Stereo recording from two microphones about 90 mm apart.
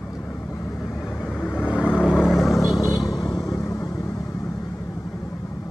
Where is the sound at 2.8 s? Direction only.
40° left (ahead or behind).